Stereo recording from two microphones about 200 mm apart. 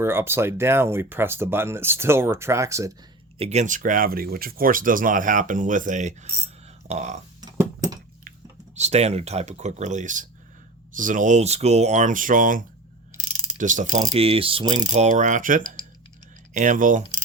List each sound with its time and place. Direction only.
0.0 s speech: 10° right (ahead or behind)
3.3 s speech: 30° right (ahead or behind)
7.4 s a sound: 20° right (ahead or behind)
8.7 s speech: 35° right (ahead or behind)
13.6 s mechanisms: 40° right (ahead or behind); by 14.8 s 25° right (ahead or behind)
14.8 s speech: 35° right (ahead or behind)